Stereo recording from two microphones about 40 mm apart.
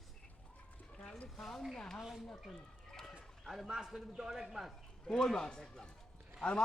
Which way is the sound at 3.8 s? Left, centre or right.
Centre.